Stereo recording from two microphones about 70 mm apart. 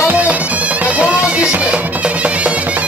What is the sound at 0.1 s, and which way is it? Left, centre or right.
Music, centre.